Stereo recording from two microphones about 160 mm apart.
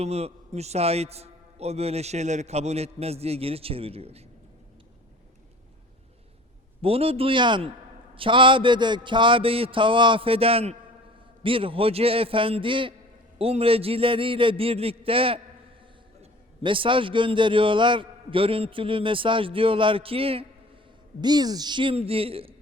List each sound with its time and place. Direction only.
0.0 s a man's voice: 40° right (ahead or behind)
6.8 s a man's voice: 40° right (ahead or behind)
16.6 s a man's voice: 30° right (ahead or behind)